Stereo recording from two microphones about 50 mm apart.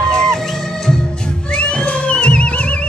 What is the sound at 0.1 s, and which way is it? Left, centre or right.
Music, centre.